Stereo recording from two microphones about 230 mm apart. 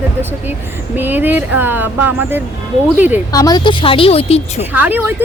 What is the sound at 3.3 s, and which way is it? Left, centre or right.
Speech, centre.